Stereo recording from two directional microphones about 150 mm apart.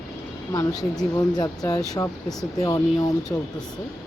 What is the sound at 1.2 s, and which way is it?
Speech, 25° left (ahead or behind).